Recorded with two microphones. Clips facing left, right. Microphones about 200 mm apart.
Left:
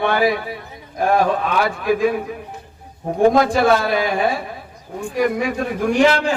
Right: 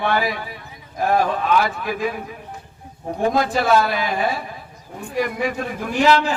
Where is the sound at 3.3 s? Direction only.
50° left (ahead or behind).